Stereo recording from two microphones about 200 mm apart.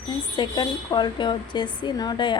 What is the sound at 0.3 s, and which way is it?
A woman's voice, 20° left (ahead or behind).